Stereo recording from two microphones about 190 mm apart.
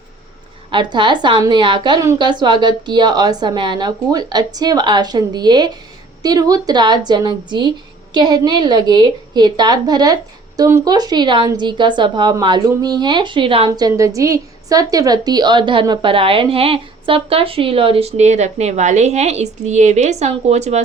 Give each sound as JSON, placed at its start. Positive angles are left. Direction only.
{"t": 0.7, "sound": "a woman's voice", "side_deg": -25}